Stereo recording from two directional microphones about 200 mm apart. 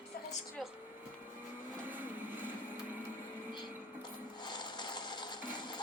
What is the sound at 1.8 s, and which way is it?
Vehicle, 10° right (ahead or behind).